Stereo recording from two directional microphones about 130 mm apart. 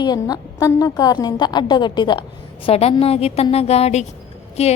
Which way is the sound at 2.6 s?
50° left (ahead or behind).